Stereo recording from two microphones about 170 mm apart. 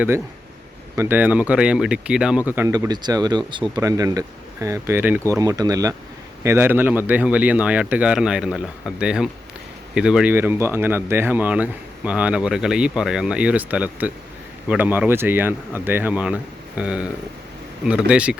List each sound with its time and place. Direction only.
0.9 s speech: 15° right (ahead or behind)